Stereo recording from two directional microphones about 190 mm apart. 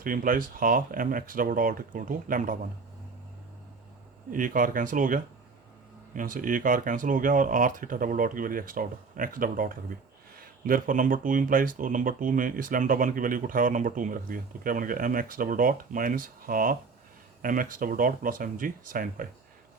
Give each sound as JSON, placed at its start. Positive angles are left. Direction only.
{"t": 0.0, "sound": "speech", "side_deg": -45}
{"t": 4.3, "sound": "speech", "side_deg": -45}